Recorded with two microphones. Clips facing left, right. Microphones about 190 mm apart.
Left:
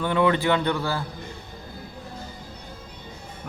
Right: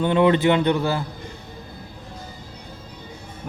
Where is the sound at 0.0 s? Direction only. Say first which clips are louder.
Right 4 dB; 20° right (ahead or behind).